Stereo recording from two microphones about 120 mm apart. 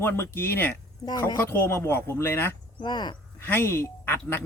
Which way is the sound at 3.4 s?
20° left (ahead or behind).